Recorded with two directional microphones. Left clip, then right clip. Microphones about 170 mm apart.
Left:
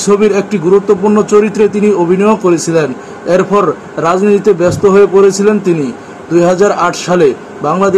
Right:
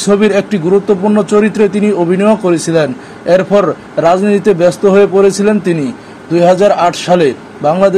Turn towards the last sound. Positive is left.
turn(degrees=-30)  # may be behind; listen again after turning